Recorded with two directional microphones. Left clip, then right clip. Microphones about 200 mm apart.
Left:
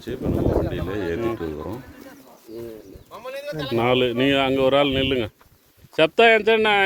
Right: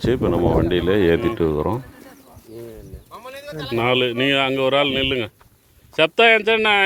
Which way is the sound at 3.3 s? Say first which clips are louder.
Left 3 dB; 40° left (ahead or behind).